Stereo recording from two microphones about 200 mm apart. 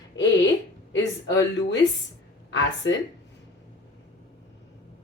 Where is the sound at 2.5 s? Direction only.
70° left (ahead or behind).